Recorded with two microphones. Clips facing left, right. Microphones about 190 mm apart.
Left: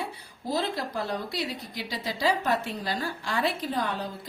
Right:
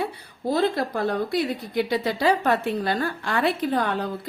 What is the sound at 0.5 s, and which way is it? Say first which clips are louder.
A woman's voice: right 6 dB; 55° right (ahead or behind).